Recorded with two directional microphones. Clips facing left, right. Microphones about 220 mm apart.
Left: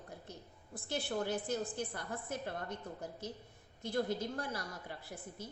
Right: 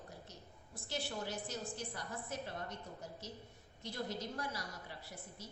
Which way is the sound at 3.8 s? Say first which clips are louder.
Left 7 dB; 55° left (ahead or behind).